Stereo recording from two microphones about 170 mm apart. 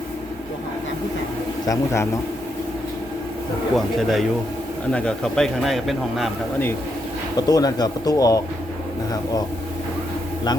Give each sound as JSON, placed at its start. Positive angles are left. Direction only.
{"t": 1.6, "sound": "speech", "side_deg": 20}
{"t": 3.8, "sound": "a man's voice", "side_deg": 0}
{"t": 7.3, "sound": "speech", "side_deg": 20}